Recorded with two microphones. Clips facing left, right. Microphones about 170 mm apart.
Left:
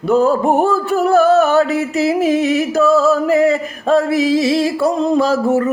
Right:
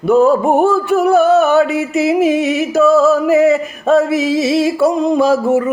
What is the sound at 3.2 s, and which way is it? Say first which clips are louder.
Male singing: right 2 dB; 20° right (ahead or behind).